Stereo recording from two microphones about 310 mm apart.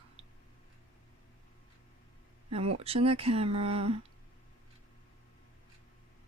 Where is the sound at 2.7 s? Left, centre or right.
Centre.